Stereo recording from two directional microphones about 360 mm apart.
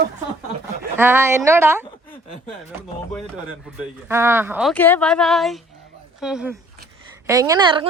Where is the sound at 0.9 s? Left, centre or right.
Centre.